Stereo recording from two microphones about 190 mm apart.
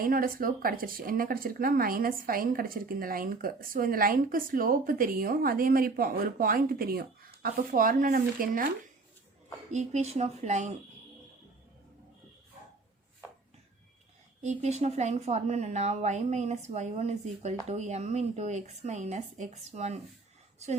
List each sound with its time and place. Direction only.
0.0 s speech: 50° right (ahead or behind)
9.7 s speech: 35° right (ahead or behind)
14.4 s speech: 35° right (ahead or behind)